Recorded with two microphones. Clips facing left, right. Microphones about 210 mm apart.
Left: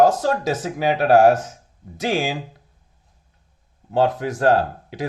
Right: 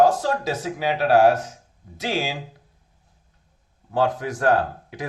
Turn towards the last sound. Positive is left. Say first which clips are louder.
# left 3 dB
turn(degrees=25)  # may be behind; listen again after turning